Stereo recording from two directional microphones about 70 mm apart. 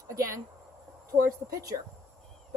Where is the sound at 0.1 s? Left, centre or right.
Right.